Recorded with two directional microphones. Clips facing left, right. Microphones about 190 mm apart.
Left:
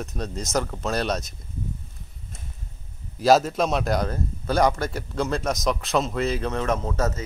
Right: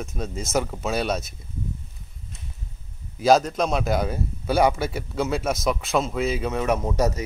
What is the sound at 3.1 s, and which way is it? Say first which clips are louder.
A man's voice: even; centre (ahead or behind).